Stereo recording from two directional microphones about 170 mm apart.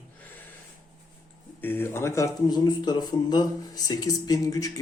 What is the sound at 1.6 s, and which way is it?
Speech, 10° left (ahead or behind).